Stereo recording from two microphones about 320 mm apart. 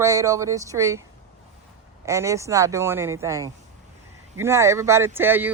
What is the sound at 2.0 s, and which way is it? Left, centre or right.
A woman's voice, centre.